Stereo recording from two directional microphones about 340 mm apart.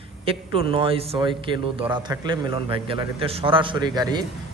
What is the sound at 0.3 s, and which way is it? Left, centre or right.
A man's voice, centre.